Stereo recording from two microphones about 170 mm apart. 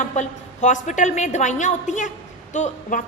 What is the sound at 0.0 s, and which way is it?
A woman's voice, 45° left (ahead or behind).